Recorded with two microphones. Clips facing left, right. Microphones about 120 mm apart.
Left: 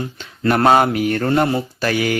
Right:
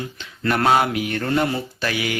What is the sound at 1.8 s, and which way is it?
Music, 45° left (ahead or behind).